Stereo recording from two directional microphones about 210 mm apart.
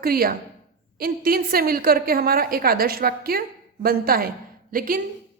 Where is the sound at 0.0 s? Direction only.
45° right (ahead or behind).